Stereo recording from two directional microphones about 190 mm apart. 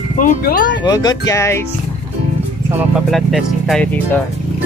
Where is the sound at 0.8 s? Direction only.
20° left (ahead or behind).